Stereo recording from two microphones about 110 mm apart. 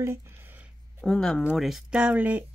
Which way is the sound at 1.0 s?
5° left (ahead or behind).